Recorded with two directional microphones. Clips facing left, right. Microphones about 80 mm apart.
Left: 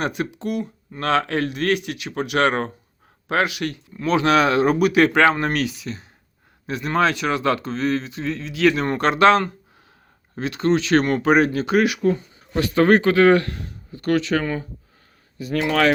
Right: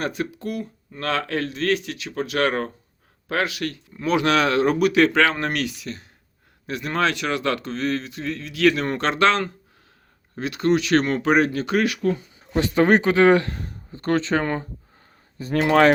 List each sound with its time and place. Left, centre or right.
0.0 s speech: centre
3.9 s speech: centre
4.3 s speech: centre
10.3 s speech: centre
12.5 s speech: right